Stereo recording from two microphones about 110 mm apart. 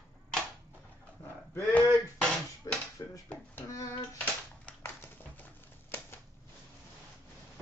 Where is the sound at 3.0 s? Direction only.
35° left (ahead or behind).